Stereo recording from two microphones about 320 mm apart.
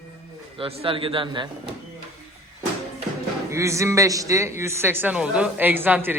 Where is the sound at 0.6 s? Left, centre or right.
Centre.